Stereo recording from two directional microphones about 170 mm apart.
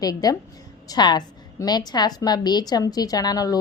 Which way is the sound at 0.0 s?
20° left (ahead or behind).